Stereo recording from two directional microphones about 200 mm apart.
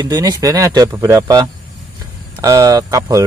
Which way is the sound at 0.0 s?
20° right (ahead or behind).